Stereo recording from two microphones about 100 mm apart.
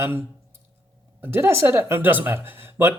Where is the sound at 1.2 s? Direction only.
20° right (ahead or behind).